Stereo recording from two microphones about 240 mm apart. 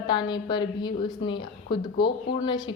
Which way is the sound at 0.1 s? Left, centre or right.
Centre.